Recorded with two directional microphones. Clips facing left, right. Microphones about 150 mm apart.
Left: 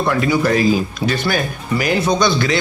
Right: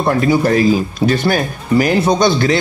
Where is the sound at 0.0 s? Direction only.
35° right (ahead or behind).